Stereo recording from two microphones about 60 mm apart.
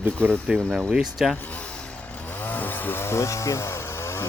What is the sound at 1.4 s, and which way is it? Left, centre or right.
Vehicle, left.